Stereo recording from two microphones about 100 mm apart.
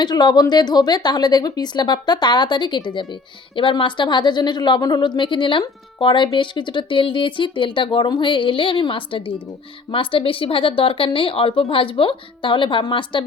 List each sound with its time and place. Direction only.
0.0 s a woman's voice: 45° left (ahead or behind)